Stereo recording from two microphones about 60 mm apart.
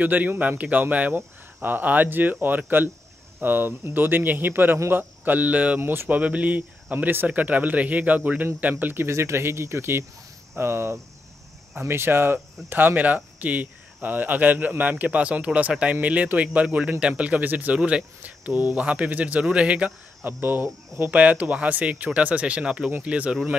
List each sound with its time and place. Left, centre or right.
0.0 s speech: right
5.8 s speech: right
9.1 s speech: right; by 19.9 s centre
20.2 s speech: right
21.0 s speech: right